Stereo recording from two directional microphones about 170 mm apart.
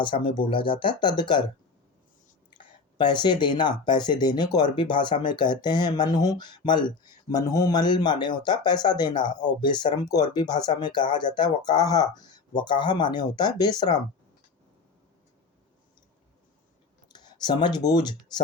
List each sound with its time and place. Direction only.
0.0 s speech: 30° left (ahead or behind)
3.0 s speech: 25° left (ahead or behind)
17.1 s speech: 25° left (ahead or behind)